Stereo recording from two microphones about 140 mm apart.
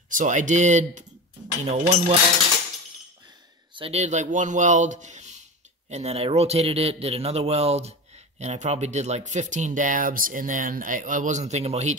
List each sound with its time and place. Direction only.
0.1 s speech: 65° right (ahead or behind)
3.7 s speech: 45° right (ahead or behind)